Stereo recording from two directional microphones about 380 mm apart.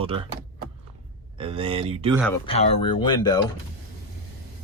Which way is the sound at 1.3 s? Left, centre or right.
Centre.